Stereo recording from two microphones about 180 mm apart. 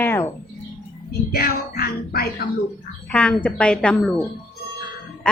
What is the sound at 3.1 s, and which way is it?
A woman's voice, 5° left (ahead or behind).